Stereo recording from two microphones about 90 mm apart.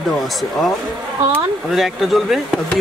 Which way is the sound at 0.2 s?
Centre (ahead or behind).